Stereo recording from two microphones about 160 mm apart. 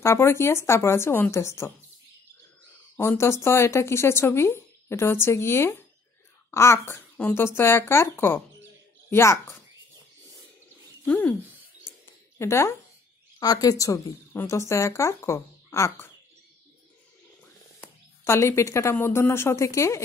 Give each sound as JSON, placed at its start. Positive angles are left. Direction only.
{"t": 0.0, "sound": "speech", "side_deg": 15}
{"t": 3.0, "sound": "speech", "side_deg": 15}
{"t": 11.1, "sound": "speech", "side_deg": 10}
{"t": 12.4, "sound": "speech", "side_deg": 15}
{"t": 17.7, "sound": "speech", "side_deg": 15}